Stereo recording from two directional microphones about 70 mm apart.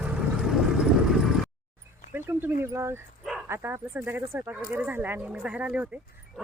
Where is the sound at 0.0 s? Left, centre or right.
Centre.